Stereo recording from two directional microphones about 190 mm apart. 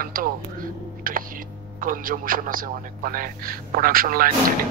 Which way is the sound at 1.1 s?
45° right (ahead or behind).